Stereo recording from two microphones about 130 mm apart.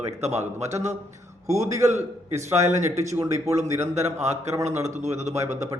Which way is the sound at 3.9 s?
60° right (ahead or behind).